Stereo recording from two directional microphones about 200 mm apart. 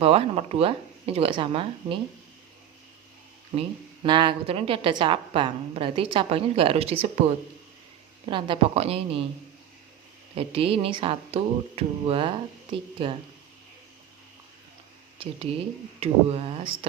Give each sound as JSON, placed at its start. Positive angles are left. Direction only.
{"t": 0.0, "sound": "a woman's voice", "side_deg": -30}
{"t": 3.5, "sound": "a woman's voice", "side_deg": -25}
{"t": 10.3, "sound": "a woman's voice", "side_deg": -30}
{"t": 15.2, "sound": "a woman's voice", "side_deg": -25}